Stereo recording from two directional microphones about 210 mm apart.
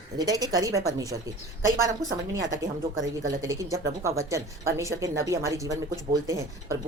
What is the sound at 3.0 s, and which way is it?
Speech, 15° right (ahead or behind).